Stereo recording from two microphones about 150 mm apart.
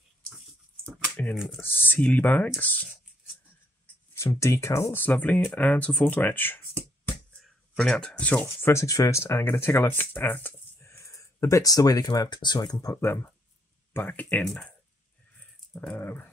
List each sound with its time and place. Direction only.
0.8 s a sound: 5° left (ahead or behind)
1.6 s speech: 15° left (ahead or behind)
4.1 s speech: 15° left (ahead or behind)
15.7 s speech: 10° left (ahead or behind)